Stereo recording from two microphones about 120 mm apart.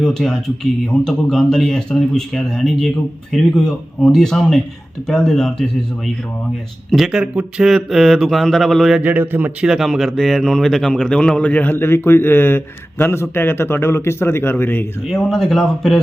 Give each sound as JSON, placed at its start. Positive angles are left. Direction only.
{"t": 0.0, "sound": "a man's voice", "side_deg": 5}
{"t": 6.9, "sound": "a man's voice", "side_deg": -5}
{"t": 9.0, "sound": "a man's voice", "side_deg": -15}
{"t": 9.6, "sound": "speech", "side_deg": 0}
{"t": 15.0, "sound": "a man's voice", "side_deg": 0}